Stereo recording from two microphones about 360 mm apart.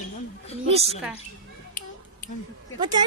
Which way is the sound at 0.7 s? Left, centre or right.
Centre.